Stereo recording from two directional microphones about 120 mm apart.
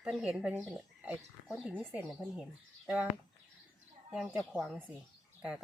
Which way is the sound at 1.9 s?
15° right (ahead or behind).